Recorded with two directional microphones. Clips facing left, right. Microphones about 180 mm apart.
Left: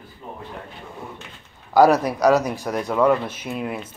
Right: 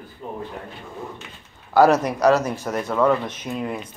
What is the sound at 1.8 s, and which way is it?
Speech, 10° left (ahead or behind).